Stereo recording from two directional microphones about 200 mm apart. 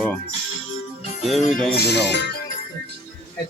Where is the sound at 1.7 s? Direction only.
55° left (ahead or behind).